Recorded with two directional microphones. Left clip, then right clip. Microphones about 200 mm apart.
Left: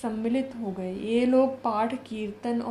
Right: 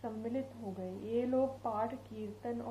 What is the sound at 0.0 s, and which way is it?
A woman's voice, 45° left (ahead or behind).